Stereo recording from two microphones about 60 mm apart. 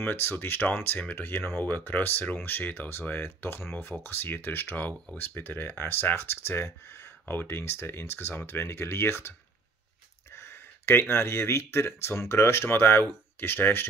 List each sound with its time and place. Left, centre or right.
0.0 s speech: left
10.3 s speech: left